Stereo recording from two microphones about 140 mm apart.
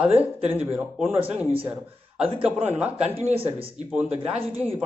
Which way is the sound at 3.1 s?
45° right (ahead or behind).